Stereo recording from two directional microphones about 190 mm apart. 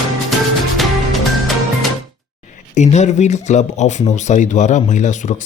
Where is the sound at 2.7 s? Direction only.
35° left (ahead or behind).